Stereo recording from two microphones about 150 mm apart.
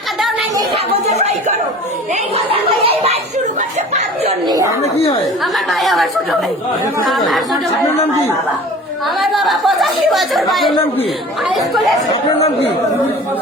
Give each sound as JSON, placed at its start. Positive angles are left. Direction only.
{"t": 2.3, "sound": "a sound", "side_deg": -40}
{"t": 4.4, "sound": "speech", "side_deg": -25}
{"t": 4.8, "sound": "speech", "side_deg": 40}
{"t": 5.4, "sound": "speech", "side_deg": 0}
{"t": 7.1, "sound": "speech", "side_deg": 0}
{"t": 9.1, "sound": "speech", "side_deg": 0}